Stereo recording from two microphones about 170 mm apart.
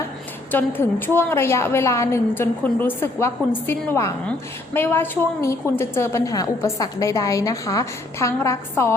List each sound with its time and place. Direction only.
0.5 s a woman's voice: 10° left (ahead or behind)